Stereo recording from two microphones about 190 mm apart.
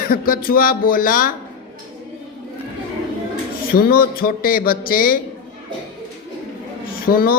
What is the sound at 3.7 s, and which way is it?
Speech, 50° left (ahead or behind).